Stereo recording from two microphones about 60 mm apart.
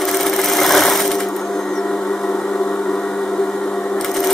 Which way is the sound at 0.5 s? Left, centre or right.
Centre.